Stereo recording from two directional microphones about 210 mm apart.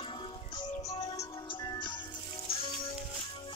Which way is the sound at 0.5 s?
20° left (ahead or behind).